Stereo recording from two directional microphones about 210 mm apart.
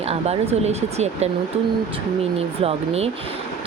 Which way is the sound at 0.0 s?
30° right (ahead or behind).